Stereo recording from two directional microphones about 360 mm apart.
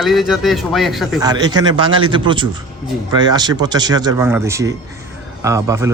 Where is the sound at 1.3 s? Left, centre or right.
Centre.